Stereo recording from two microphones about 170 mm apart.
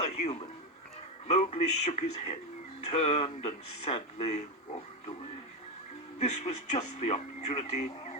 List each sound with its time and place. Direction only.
0.0 s a man's voice: 40° left (ahead or behind)
6.1 s speech: 40° left (ahead or behind)